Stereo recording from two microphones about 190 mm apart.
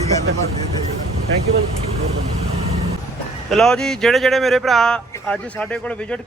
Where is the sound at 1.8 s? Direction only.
35° right (ahead or behind).